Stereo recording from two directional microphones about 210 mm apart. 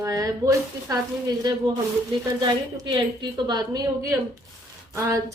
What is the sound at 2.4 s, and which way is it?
A woman's voice, 20° right (ahead or behind).